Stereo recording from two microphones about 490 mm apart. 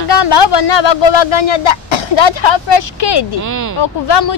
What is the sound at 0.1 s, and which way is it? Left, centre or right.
Speech, left.